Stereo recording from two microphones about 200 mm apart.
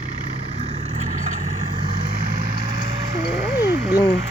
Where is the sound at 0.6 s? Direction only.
30° right (ahead or behind).